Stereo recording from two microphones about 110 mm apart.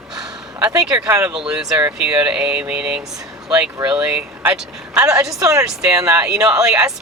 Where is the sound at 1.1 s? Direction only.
25° right (ahead or behind).